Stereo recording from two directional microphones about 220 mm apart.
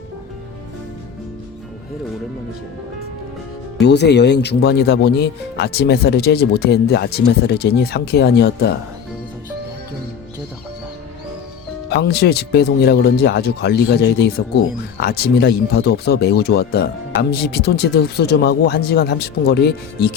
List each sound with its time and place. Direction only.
3.8 s speech: 50° left (ahead or behind)
11.9 s speech: 50° left (ahead or behind)